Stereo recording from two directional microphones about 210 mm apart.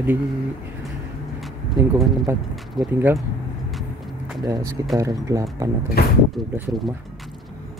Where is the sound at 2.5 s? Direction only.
Centre (ahead or behind).